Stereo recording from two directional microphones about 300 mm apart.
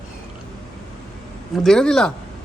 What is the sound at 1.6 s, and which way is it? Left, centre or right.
Speech, centre.